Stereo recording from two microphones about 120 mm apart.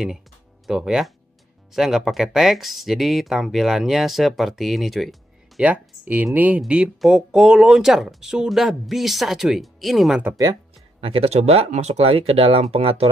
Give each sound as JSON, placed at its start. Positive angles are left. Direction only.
{"t": 0.7, "sound": "speech", "side_deg": -5}
{"t": 5.6, "sound": "speech", "side_deg": -10}
{"t": 10.3, "sound": "speech", "side_deg": -30}
{"t": 11.0, "sound": "speech", "side_deg": -55}